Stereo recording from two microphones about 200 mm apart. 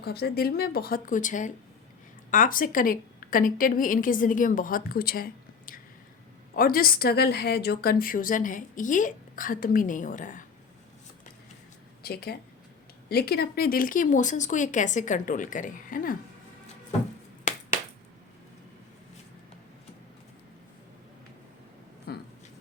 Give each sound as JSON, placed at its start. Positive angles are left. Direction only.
{"t": 0.0, "sound": "a woman's voice", "side_deg": 50}
{"t": 12.0, "sound": "a woman's voice", "side_deg": 50}
{"t": 17.5, "sound": "finger snapping", "side_deg": 40}
{"t": 22.1, "sound": "a sound", "side_deg": 50}